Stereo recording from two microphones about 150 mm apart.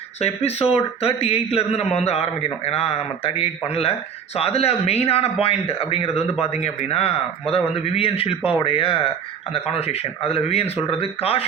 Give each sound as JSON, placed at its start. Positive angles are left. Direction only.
{"t": 0.2, "sound": "speech", "side_deg": 45}